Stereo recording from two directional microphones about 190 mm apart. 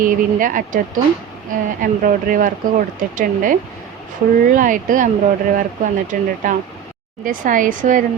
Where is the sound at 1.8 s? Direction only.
45° right (ahead or behind).